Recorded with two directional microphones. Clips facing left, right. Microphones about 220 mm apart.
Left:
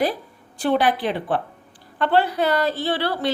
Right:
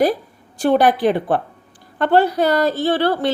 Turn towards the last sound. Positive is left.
turn(degrees=-50)  # may be behind; listen again after turning